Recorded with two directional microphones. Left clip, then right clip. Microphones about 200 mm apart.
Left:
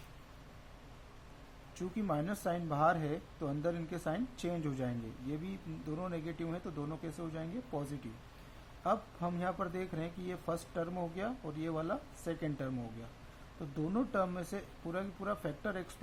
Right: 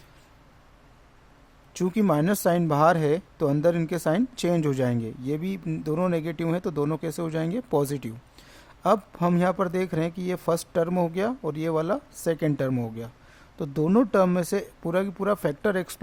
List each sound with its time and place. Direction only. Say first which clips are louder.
1.7 s speech: right 14 dB; 55° right (ahead or behind)